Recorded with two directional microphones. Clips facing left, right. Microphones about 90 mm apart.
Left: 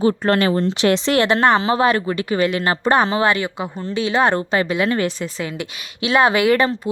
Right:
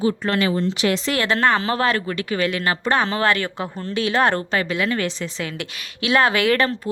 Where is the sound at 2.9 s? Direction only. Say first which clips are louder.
Left 3 dB; 15° left (ahead or behind).